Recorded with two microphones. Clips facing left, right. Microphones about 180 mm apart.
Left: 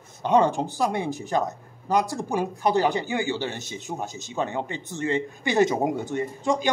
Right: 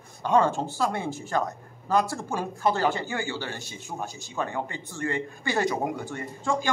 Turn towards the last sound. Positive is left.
turn(degrees=20)  # may be behind; listen again after turning